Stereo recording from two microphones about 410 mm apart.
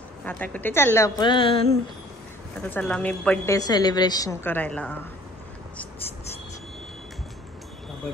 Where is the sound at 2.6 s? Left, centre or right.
Centre.